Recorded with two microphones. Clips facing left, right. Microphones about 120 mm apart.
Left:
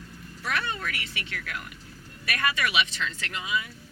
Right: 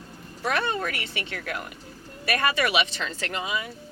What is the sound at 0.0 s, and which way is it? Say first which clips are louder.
Speech: right 6 dB; 35° right (ahead or behind).